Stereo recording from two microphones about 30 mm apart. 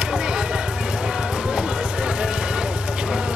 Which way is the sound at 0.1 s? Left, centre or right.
Right.